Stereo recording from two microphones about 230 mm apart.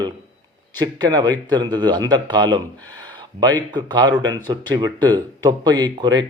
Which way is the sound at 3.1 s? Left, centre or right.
Centre.